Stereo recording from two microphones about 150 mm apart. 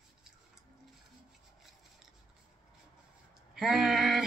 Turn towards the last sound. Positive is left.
turn(degrees=0)  # may be behind; listen again after turning